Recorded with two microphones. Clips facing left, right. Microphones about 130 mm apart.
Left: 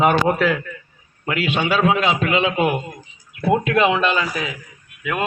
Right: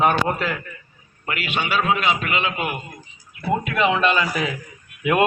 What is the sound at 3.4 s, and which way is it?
Speech, 90° left.